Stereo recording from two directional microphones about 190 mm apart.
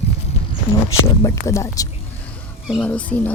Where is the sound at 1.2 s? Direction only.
15° left (ahead or behind).